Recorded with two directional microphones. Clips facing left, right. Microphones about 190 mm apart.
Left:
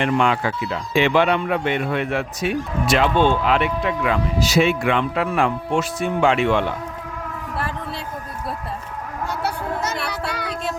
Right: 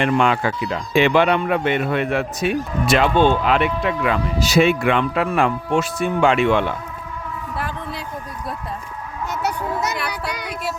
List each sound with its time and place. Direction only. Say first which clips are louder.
0.0 s speech: right 1 dB; 55° right (ahead or behind)
10.1 s child singing: left 1 dB; 15° right (ahead or behind)